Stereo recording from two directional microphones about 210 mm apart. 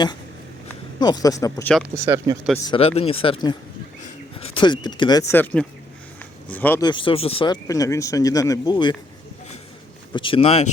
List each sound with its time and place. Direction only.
0.9 s speech: 20° left (ahead or behind)
2.0 s speech: 15° right (ahead or behind)
2.6 s speech: 25° left (ahead or behind); by 6.8 s 10° left (ahead or behind)
6.8 s speech: 25° left (ahead or behind)
10.1 s speech: 25° left (ahead or behind)